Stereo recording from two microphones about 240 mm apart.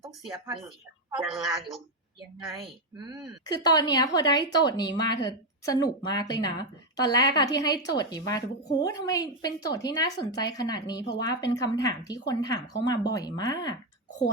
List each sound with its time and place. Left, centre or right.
1.1 s speech: centre
2.9 s speech: centre
3.4 s a woman's voice: centre